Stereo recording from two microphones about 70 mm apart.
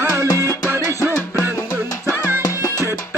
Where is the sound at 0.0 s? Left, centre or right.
Right.